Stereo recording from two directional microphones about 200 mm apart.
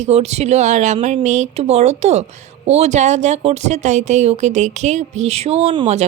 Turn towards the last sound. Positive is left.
turn(degrees=-30)  # may be behind; listen again after turning